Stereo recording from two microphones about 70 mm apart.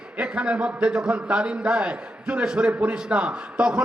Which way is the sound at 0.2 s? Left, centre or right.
Centre.